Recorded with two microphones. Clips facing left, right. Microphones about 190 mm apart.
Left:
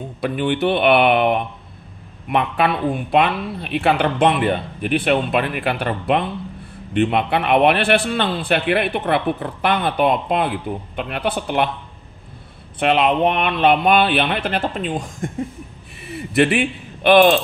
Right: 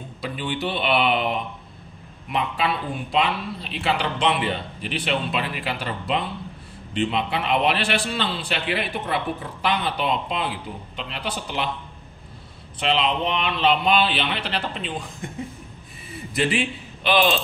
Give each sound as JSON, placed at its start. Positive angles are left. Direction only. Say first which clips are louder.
{"t": 0.2, "sound": "a man's voice", "louder": "left 8 dB", "side_deg": 60}
{"t": 12.7, "sound": "a man's voice", "louder": "left 6 dB", "side_deg": 55}
{"t": 16.1, "sound": "a man's voice", "louder": "left 7 dB", "side_deg": 70}